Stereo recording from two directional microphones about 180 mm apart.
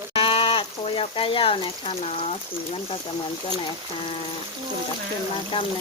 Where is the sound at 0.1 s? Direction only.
30° left (ahead or behind).